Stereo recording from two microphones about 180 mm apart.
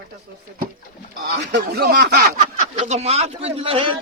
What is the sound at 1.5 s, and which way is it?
Speech, 65° right (ahead or behind).